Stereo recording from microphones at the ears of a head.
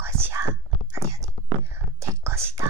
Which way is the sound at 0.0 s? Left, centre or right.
Right.